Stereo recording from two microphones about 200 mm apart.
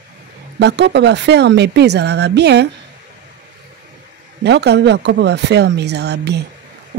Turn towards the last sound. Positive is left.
turn(degrees=-55)  # may be behind; listen again after turning